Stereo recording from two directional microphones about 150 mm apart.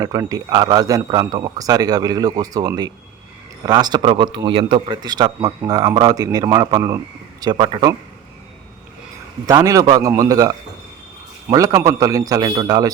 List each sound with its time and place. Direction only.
0.0 s a man's voice: 25° right (ahead or behind)
9.5 s a man's voice: 25° right (ahead or behind)